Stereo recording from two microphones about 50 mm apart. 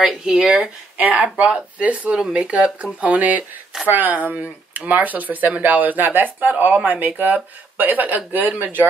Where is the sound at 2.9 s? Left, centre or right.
Right.